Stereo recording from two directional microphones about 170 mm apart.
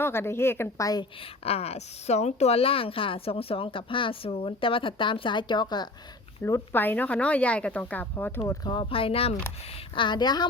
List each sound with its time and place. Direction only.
0.0 s speech: 15° left (ahead or behind)
1.5 s a woman's voice: 35° left (ahead or behind)
6.4 s speech: 15° left (ahead or behind)
8.4 s a woman's voice: 25° left (ahead or behind)